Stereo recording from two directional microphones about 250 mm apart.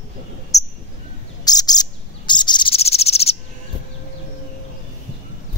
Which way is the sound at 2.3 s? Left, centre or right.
Centre.